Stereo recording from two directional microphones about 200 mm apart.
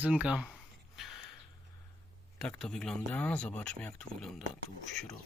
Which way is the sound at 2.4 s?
5° left (ahead or behind).